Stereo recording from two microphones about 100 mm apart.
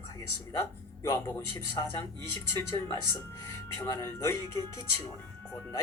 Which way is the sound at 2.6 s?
30° left (ahead or behind).